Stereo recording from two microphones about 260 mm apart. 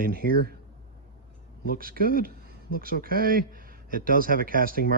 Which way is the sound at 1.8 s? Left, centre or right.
Right.